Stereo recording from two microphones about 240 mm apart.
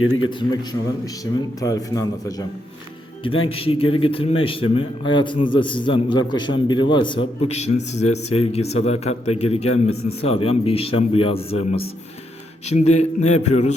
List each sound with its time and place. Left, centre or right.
0.3 s a man's voice: centre
3.5 s speech: left
12.6 s speech: left